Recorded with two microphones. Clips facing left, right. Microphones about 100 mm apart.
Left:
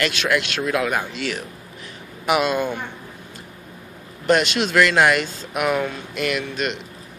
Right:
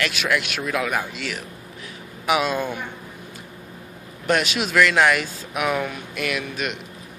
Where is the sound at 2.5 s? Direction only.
20° left (ahead or behind).